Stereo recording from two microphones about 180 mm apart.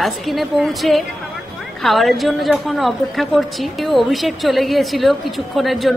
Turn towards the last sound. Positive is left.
turn(degrees=0)  # may be behind; listen again after turning